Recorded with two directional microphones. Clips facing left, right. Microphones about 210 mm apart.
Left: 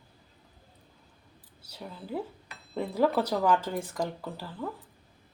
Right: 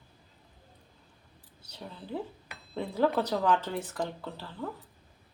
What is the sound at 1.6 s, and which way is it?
Speech, 5° left (ahead or behind).